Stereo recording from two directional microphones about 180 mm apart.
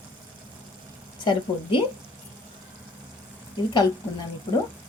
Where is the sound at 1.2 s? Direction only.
25° left (ahead or behind).